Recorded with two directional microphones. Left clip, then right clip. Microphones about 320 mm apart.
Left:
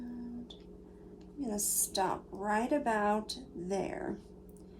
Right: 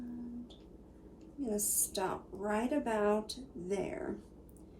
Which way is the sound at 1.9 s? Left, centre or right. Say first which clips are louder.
Left 7 dB; left.